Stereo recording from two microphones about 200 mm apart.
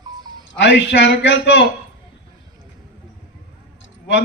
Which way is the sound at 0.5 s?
60° left (ahead or behind).